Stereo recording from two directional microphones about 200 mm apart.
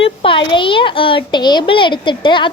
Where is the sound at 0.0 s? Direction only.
25° left (ahead or behind).